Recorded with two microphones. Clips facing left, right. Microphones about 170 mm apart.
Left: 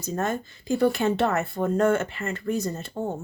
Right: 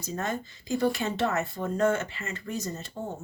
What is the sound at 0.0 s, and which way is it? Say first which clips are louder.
Speech: left 4 dB; 50° left (ahead or behind).